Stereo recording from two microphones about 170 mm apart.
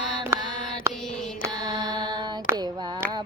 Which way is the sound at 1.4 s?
25° right (ahead or behind).